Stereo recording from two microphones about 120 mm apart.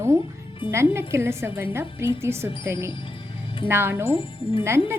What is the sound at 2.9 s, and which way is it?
Music, 45° left (ahead or behind).